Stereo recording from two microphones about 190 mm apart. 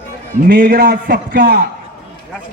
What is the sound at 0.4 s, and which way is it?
A man's voice, 55° right (ahead or behind).